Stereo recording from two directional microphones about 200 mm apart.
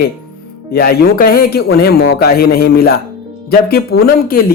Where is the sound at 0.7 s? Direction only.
50° left (ahead or behind).